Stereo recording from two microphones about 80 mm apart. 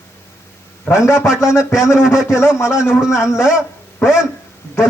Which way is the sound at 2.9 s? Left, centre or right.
Centre.